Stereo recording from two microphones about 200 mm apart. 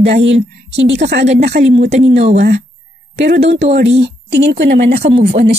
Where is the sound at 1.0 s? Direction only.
60° right (ahead or behind).